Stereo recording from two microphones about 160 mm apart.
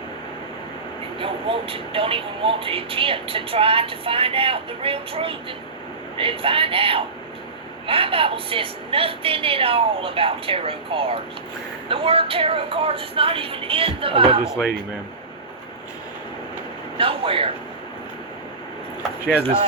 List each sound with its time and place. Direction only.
1.2 s speech: 35° right (ahead or behind)
14.4 s speech: 5° right (ahead or behind)
17.0 s speech: 35° right (ahead or behind)
19.2 s speech: 10° right (ahead or behind)